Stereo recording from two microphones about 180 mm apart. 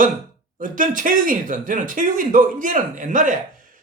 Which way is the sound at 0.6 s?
50° right (ahead or behind).